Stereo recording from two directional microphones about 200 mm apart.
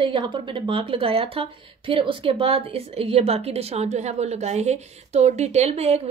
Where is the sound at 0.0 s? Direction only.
25° right (ahead or behind).